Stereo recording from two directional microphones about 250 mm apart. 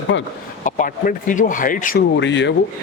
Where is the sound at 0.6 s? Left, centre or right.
Left.